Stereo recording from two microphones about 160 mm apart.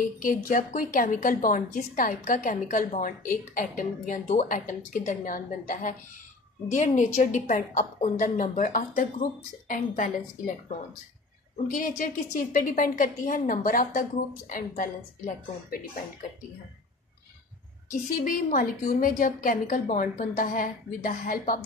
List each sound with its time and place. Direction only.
0.2 s a woman's voice: 55° left (ahead or behind)
11.7 s a woman's voice: 60° left (ahead or behind)
18.1 s a woman's voice: 60° left (ahead or behind)